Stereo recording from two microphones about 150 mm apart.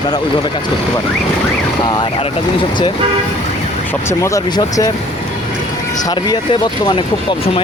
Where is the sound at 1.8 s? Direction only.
30° left (ahead or behind).